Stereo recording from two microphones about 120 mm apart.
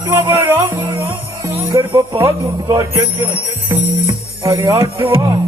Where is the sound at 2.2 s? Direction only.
30° right (ahead or behind).